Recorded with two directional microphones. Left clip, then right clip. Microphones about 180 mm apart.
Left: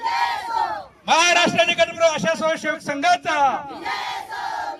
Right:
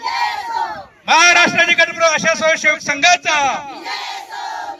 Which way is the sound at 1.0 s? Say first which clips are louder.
Right 6 dB; 25° right (ahead or behind).